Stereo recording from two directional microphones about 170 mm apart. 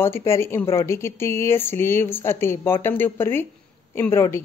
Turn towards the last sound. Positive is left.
turn(degrees=15)  # may be behind; listen again after turning